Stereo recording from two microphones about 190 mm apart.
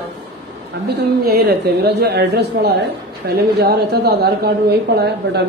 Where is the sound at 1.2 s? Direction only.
55° right (ahead or behind).